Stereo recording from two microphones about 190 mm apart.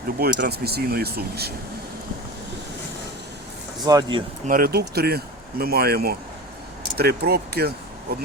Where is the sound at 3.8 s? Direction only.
20° right (ahead or behind).